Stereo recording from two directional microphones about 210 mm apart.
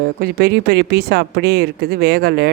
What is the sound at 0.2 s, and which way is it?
Speech, 45° right (ahead or behind).